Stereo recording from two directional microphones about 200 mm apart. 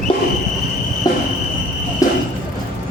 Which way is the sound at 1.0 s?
20° left (ahead or behind).